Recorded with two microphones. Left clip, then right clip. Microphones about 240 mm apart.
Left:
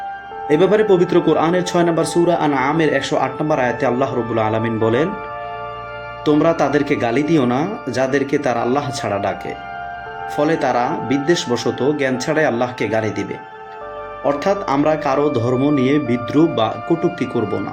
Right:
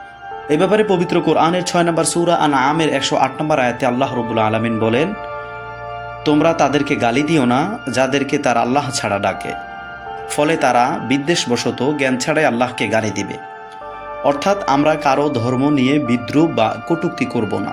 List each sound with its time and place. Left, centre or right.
0.4 s speech: right
6.2 s speech: right
10.3 s speech: right
14.3 s speech: right